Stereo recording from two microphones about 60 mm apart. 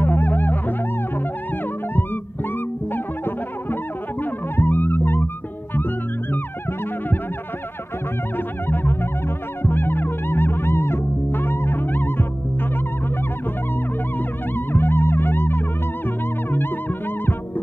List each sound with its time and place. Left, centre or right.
0.0 s music: left
4.2 s music: left
8.6 s music: left
14.5 s music: left